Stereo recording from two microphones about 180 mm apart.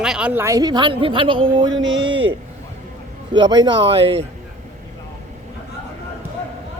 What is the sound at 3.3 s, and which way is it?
Speech, 25° right (ahead or behind).